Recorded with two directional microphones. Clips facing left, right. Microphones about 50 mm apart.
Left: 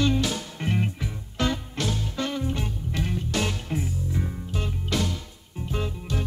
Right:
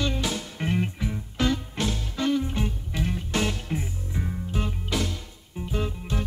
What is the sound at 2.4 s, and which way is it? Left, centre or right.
Music, centre.